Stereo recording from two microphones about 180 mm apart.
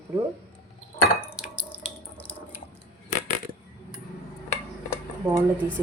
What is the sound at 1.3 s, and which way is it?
Dishes, 5° right (ahead or behind).